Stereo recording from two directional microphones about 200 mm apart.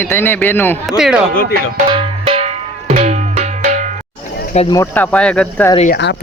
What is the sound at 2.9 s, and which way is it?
Music, 35° right (ahead or behind).